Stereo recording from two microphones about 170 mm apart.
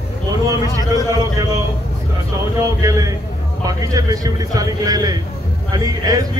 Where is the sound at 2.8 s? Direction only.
20° right (ahead or behind).